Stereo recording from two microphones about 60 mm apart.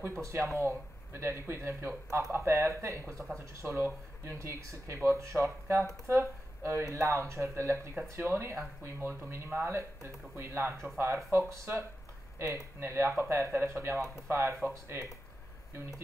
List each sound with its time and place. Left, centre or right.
0.0 s speech: right
12.8 s speech: right